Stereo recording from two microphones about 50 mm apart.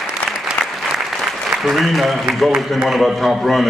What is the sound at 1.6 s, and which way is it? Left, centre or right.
A man's voice, centre.